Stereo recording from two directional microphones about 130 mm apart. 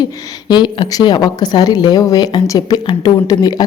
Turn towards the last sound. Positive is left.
turn(degrees=30)  # may be behind; listen again after turning